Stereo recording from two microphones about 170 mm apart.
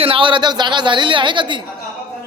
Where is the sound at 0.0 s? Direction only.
30° right (ahead or behind).